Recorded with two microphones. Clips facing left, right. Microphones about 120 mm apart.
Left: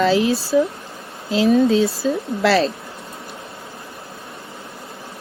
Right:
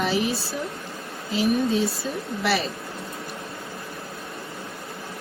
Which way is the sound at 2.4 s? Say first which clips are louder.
Left 8 dB; 90° left.